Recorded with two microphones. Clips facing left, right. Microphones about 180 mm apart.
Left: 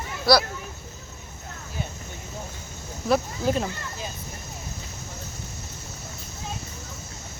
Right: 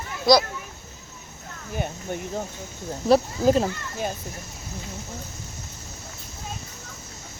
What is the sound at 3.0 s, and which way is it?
Speech, 35° right (ahead or behind).